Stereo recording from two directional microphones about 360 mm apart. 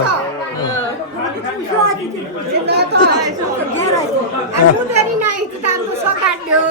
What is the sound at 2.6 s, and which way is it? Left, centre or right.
Chatter, right.